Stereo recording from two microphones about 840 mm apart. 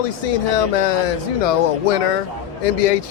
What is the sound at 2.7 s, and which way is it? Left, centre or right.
Speech, left.